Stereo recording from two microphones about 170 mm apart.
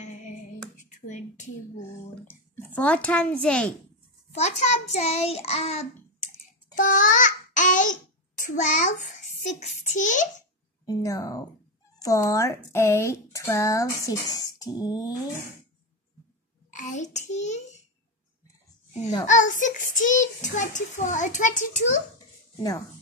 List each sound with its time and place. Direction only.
0.0 s female singing: 45° left (ahead or behind)
0.8 s a sound: 45° left (ahead or behind)
2.2 s a child's voice: 10° left (ahead or behind)
4.3 s child singing: 40° left (ahead or behind)
6.7 s babbling: 50° left (ahead or behind)
9.9 s a child's voice: 50° left (ahead or behind)
10.9 s speech: 20° left (ahead or behind)
16.7 s a child's voice: 45° left (ahead or behind)
19.2 s a child's voice: 45° left (ahead or behind)
22.6 s speech: 20° left (ahead or behind)